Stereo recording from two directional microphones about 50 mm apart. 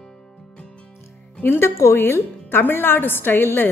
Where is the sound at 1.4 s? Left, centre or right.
Left.